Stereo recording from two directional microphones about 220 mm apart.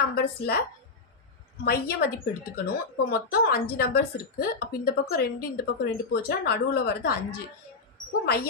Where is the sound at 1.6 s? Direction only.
45° left (ahead or behind).